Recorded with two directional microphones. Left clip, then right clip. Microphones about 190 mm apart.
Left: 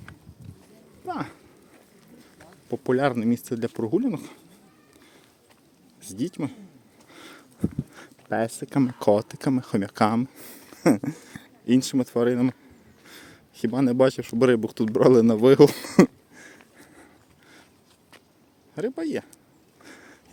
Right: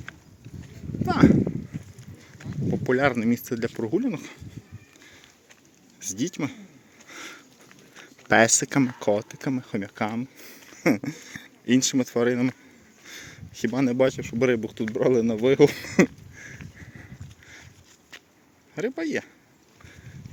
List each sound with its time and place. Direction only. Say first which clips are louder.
1.0 s a sound: right 12 dB; centre (ahead or behind)
2.4 s speech: right 3 dB; 10° left (ahead or behind)
6.0 s speech: right 1 dB; 5° left (ahead or behind)
7.1 s a sound: right 6 dB; 5° left (ahead or behind)
8.3 s speech: right 8 dB; 15° right (ahead or behind)
9.0 s speech: left 3 dB; 25° left (ahead or behind)
18.7 s speech: even; 10° left (ahead or behind)